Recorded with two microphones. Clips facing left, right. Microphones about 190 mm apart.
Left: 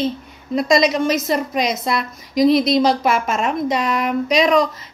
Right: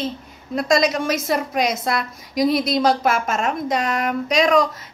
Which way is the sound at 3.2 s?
45° right (ahead or behind).